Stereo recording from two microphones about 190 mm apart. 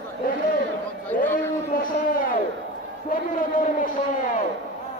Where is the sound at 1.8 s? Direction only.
45° left (ahead or behind).